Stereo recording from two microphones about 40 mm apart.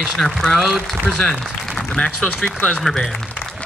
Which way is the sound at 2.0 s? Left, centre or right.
Left.